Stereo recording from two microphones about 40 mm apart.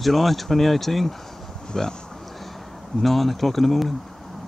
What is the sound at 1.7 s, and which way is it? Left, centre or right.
Speech, centre.